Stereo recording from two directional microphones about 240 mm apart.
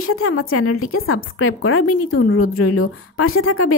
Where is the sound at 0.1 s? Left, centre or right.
Left.